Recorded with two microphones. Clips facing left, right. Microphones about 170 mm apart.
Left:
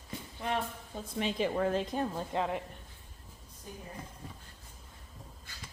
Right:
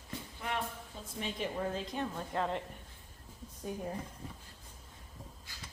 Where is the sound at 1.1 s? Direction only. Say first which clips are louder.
Left 6 dB; 90° left.